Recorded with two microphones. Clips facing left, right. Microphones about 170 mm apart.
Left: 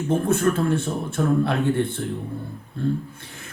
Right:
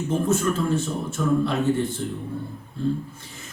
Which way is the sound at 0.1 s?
60° left (ahead or behind).